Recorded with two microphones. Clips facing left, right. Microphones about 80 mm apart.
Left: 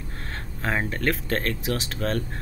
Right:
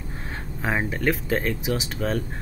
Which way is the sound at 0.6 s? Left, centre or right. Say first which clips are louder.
Right 1 dB; centre.